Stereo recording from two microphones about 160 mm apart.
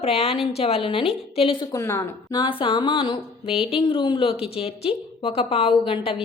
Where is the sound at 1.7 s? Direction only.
20° left (ahead or behind).